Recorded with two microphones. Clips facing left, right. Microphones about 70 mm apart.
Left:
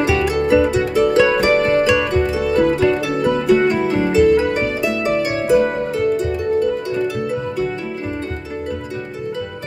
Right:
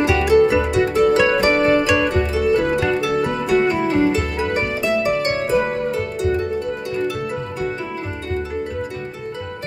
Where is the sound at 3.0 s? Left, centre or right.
Right.